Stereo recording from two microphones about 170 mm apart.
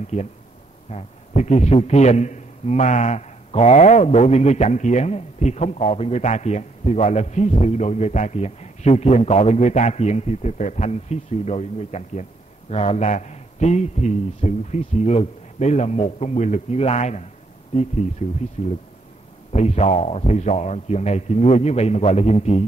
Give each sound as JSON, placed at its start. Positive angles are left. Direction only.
{"t": 0.0, "sound": "a man's voice", "side_deg": 40}